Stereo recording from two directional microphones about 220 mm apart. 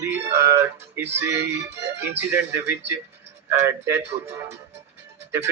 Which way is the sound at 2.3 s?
10° right (ahead or behind).